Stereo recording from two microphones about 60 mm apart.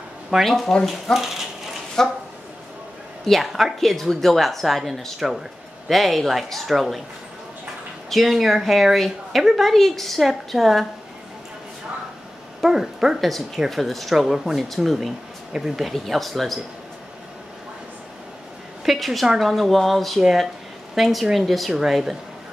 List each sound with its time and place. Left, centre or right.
0.3 s a woman's voice: centre
3.3 s a woman's voice: centre
8.1 s a woman's voice: centre
12.6 s a woman's voice: centre
18.9 s a woman's voice: centre